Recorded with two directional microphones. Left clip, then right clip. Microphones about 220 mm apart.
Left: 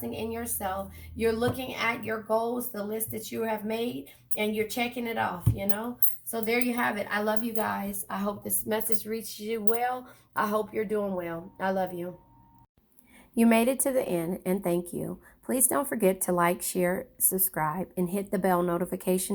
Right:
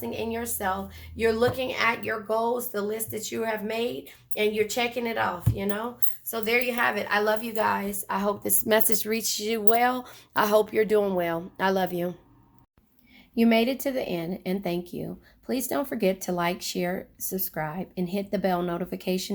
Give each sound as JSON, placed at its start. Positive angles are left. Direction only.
{"t": 0.3, "sound": "speech", "side_deg": -45}
{"t": 8.6, "sound": "speech", "side_deg": -55}
{"t": 13.3, "sound": "a woman's voice", "side_deg": 10}